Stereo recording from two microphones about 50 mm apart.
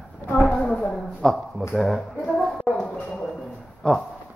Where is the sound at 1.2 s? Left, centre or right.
Centre.